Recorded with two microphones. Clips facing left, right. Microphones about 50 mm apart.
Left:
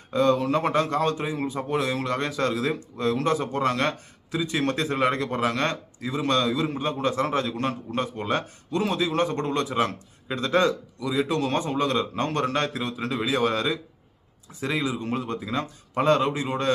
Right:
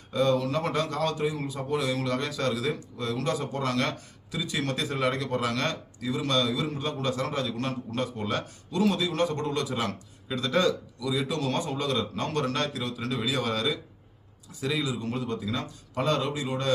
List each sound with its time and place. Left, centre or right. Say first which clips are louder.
0.1 s speech: left 4 dB; left